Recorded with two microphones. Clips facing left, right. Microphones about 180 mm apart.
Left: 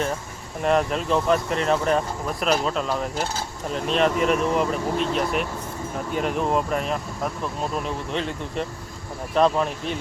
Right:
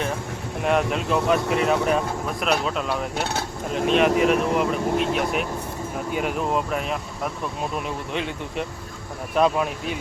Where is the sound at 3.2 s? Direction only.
65° right (ahead or behind).